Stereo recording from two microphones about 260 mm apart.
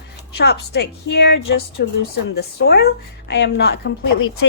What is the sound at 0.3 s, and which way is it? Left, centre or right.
Speech, left.